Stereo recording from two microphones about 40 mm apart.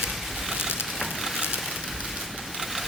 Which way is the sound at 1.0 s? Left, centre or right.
Centre.